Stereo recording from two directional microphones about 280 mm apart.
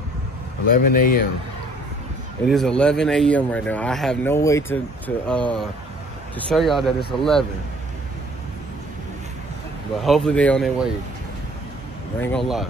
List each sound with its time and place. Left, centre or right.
0.7 s speech: left
2.5 s speech: centre
10.0 s speech: centre
12.2 s speech: centre